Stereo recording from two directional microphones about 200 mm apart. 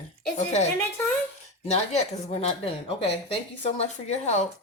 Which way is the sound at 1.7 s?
35° left (ahead or behind).